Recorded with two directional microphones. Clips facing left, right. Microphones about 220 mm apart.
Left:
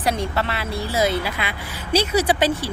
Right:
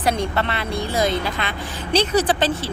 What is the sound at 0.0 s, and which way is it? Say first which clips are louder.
A woman's voice: right 1 dB; centre (ahead or behind).